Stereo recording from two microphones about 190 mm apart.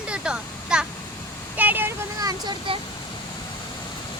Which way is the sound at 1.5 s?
10° right (ahead or behind).